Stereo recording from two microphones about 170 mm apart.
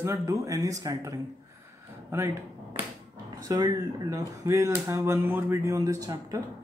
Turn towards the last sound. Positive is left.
turn(degrees=-20)  # may be behind; listen again after turning